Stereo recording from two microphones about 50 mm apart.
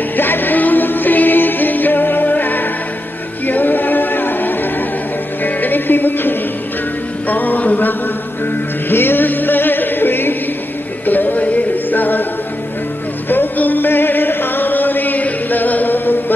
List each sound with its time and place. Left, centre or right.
0.1 s music: left
8.8 s music: left
13.3 s chant: left